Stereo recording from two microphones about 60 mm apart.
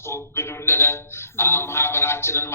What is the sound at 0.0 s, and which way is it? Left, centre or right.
A man's voice, left.